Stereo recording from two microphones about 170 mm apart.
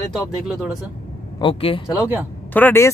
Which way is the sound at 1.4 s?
35° left (ahead or behind).